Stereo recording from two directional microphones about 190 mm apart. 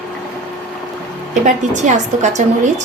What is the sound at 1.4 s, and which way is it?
A woman's voice, 40° right (ahead or behind).